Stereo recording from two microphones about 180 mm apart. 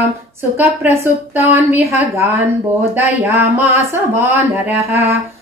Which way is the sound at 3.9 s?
15° right (ahead or behind).